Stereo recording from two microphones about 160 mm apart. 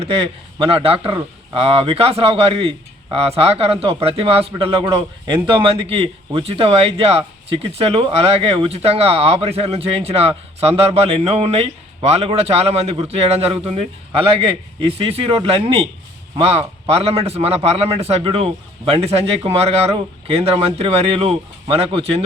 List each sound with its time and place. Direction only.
0.0 s speech: 35° right (ahead or behind)